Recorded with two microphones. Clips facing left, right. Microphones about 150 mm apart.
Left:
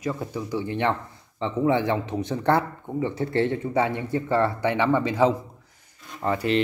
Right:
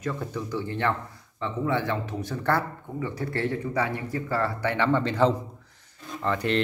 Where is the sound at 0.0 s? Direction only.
10° left (ahead or behind).